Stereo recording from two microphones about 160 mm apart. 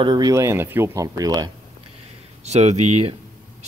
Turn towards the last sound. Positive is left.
turn(degrees=-45)  # may be behind; listen again after turning